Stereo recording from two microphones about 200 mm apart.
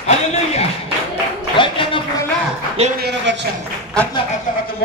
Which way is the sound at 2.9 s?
55° right (ahead or behind).